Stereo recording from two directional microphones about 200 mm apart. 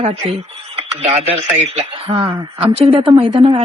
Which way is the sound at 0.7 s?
30° right (ahead or behind).